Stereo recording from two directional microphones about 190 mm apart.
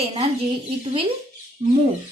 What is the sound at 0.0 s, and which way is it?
Speech, 30° right (ahead or behind).